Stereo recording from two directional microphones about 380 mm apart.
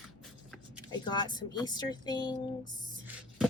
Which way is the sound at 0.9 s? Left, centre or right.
Centre.